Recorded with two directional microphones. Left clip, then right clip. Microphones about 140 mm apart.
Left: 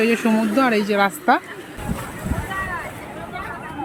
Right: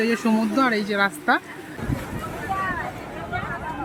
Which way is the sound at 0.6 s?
15° left (ahead or behind).